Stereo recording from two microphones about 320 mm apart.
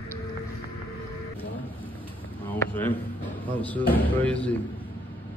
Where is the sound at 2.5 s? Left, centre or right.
Centre.